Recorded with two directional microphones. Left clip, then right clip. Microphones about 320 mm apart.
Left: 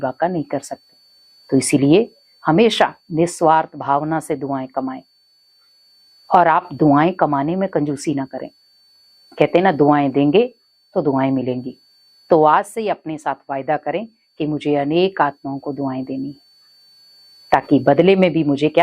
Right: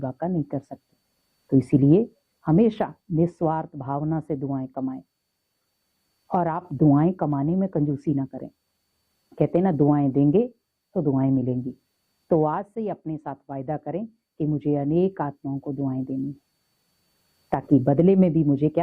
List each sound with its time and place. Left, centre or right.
0.0 s speech: centre
6.2 s speech: centre
17.5 s speech: centre